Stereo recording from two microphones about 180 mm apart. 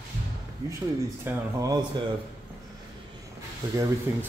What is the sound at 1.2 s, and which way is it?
Speech, 20° right (ahead or behind).